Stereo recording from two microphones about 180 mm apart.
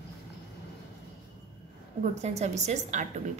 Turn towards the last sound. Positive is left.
turn(degrees=-40)  # may be behind; listen again after turning